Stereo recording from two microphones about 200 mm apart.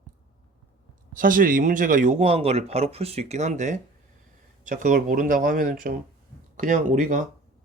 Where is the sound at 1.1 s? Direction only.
45° right (ahead or behind).